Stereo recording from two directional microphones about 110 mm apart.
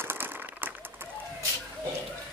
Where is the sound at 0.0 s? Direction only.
20° right (ahead or behind).